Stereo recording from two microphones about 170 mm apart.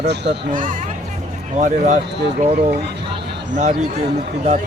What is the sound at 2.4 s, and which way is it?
Speech, 35° right (ahead or behind).